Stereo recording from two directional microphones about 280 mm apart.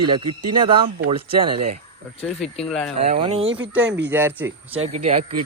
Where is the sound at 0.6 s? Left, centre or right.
Centre.